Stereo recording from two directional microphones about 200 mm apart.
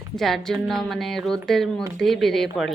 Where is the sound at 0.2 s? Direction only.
Centre (ahead or behind).